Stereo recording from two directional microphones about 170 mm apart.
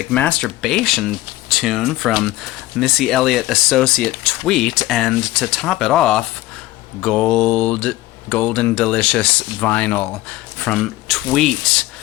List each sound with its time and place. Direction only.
0.0 s speech: 5° left (ahead or behind)